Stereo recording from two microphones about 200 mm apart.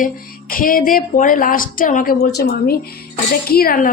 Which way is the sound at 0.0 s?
45° left (ahead or behind).